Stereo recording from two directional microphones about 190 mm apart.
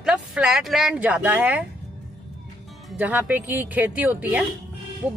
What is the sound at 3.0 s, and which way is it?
Speech, 10° right (ahead or behind).